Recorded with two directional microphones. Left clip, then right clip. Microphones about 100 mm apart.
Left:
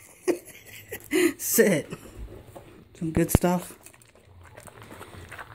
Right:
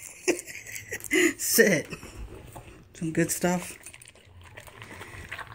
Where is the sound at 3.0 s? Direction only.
15° left (ahead or behind).